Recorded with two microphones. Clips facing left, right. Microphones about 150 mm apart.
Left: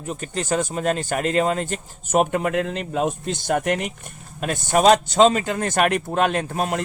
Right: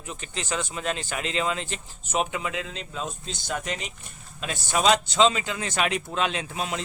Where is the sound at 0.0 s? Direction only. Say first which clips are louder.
Left 8 dB; 45° left (ahead or behind).